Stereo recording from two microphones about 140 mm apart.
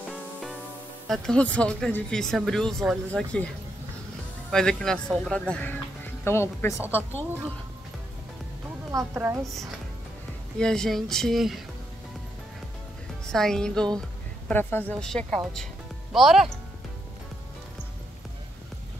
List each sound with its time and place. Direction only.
0.1 s music: centre (ahead or behind)
1.0 s speech: centre (ahead or behind)
4.5 s a woman's voice: 5° left (ahead or behind)
8.9 s a woman's voice: 20° right (ahead or behind)
10.6 s speech: 5° left (ahead or behind)
13.3 s a woman's voice: 5° left (ahead or behind)